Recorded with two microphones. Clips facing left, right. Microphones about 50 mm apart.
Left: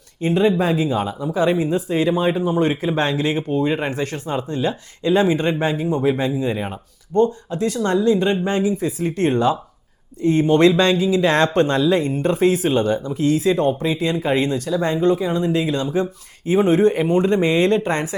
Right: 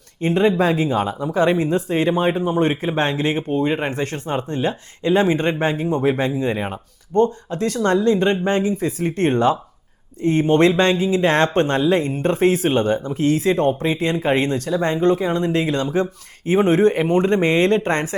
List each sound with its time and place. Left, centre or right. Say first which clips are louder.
0.2 s speech: even; right